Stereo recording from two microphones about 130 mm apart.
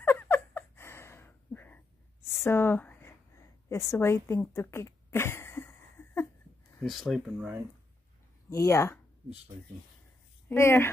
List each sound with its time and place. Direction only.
0.0 s a sound: 15° left (ahead or behind)
6.8 s speech: centre (ahead or behind)
8.5 s speech: 25° left (ahead or behind)
10.5 s a woman's voice: 20° left (ahead or behind)